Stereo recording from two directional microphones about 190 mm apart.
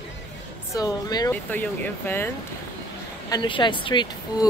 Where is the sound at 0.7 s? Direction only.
20° left (ahead or behind).